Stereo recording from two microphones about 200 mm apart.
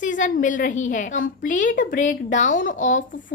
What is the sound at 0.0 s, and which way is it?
Speech, 40° left (ahead or behind).